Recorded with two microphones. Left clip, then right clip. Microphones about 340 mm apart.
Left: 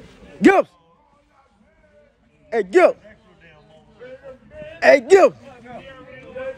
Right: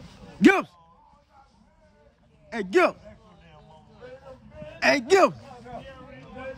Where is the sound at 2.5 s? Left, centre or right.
Centre.